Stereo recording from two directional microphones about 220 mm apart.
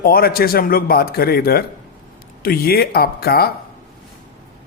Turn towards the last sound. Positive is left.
turn(degrees=45)  # may be behind; listen again after turning